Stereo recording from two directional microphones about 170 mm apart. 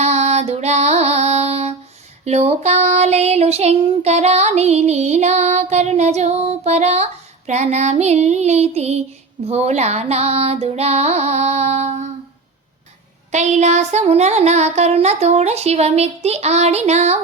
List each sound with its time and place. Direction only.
0.0 s music: 40° right (ahead or behind)
2.2 s child singing: 40° right (ahead or behind)
13.3 s child singing: 45° right (ahead or behind)